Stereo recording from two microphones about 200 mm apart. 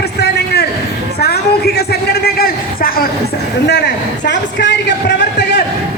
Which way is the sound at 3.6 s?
60° left (ahead or behind).